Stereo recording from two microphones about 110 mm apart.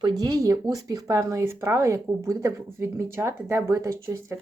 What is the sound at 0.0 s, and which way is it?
Speech, 35° right (ahead or behind).